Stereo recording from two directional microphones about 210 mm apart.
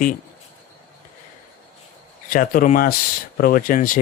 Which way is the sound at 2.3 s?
40° left (ahead or behind).